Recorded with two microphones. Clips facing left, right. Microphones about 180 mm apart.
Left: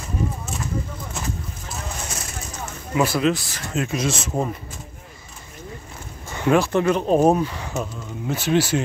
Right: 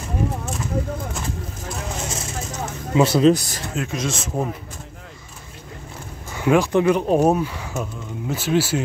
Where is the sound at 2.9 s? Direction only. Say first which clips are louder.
Right 5 dB; 25° right (ahead or behind).